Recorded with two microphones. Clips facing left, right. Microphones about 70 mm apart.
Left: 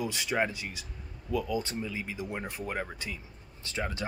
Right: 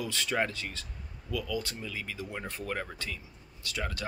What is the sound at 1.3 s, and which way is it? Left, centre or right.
Speech, left.